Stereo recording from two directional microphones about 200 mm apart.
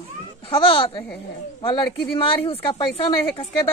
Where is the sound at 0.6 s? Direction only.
25° left (ahead or behind).